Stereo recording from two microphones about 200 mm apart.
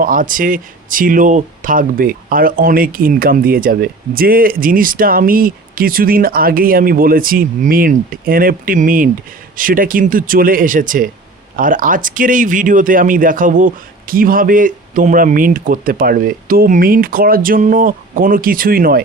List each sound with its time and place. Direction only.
0.0 s speech: 45° right (ahead or behind)